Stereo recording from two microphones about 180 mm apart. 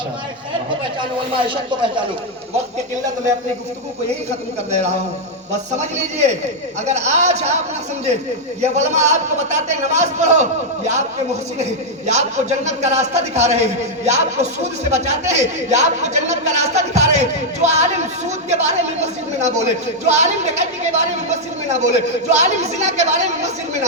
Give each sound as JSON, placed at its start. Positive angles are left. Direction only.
{"t": 4.3, "sound": "speech", "side_deg": -40}
{"t": 8.6, "sound": "speech", "side_deg": -40}
{"t": 11.6, "sound": "speech", "side_deg": -40}